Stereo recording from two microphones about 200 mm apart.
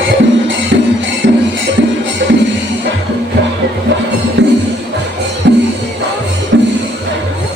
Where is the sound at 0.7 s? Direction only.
60° right (ahead or behind).